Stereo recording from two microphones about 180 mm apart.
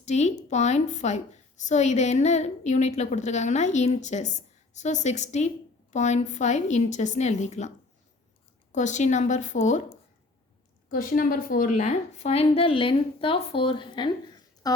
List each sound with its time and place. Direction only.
0.0 s a woman's voice: 40° left (ahead or behind)
8.7 s a woman's voice: 40° left (ahead or behind)
10.8 s a woman's voice: 50° left (ahead or behind); by 14.1 s 25° left (ahead or behind)